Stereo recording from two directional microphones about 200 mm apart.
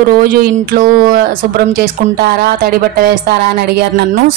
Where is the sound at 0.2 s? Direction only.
50° right (ahead or behind).